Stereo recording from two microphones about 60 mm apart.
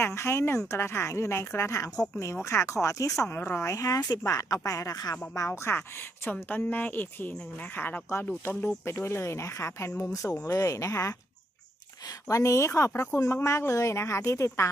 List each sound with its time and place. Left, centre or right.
0.0 s a woman's voice: left
3.3 s speech: left
3.6 s a woman's voice: left
4.2 s speech: left
5.5 s speech: left
8.4 s speech: left
10.0 s a woman's voice: left
12.9 s speech: left
13.1 s a woman's voice: left